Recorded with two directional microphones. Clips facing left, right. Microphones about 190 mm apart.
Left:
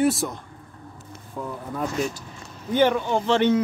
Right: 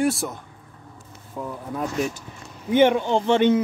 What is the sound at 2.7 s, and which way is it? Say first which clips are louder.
Speech: right 3 dB; 20° right (ahead or behind).